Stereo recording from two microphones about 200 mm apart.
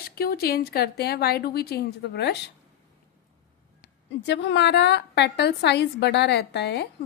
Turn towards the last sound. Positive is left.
turn(degrees=55)  # may be behind; listen again after turning